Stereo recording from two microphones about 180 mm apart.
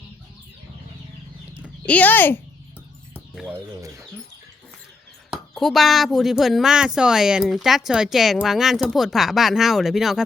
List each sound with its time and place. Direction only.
1.9 s speech: 10° left (ahead or behind)
3.8 s speech: 20° right (ahead or behind)
5.3 s speech: centre (ahead or behind)